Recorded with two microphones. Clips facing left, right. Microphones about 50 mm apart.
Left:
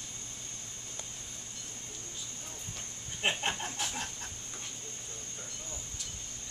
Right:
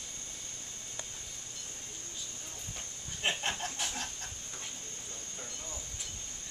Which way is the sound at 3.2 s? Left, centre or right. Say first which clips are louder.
Left 2 dB; centre.